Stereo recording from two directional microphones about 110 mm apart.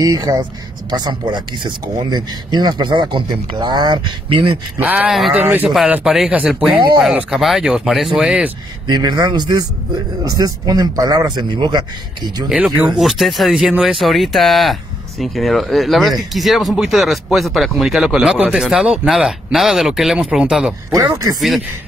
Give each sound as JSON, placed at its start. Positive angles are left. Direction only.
{"t": 0.0, "sound": "speech", "side_deg": -35}
{"t": 4.7, "sound": "speech", "side_deg": -15}
{"t": 5.1, "sound": "speech", "side_deg": 0}
{"t": 8.8, "sound": "speech", "side_deg": -40}
{"t": 12.4, "sound": "speech", "side_deg": -5}
{"t": 20.9, "sound": "speech", "side_deg": -30}
{"t": 21.4, "sound": "speech", "side_deg": 0}